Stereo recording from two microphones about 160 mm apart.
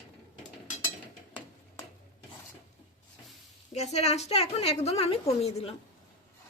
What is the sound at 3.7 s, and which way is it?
A woman's voice, 45° left (ahead or behind).